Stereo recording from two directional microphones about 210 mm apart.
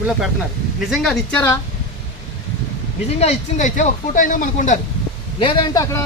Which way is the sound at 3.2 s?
35° left (ahead or behind).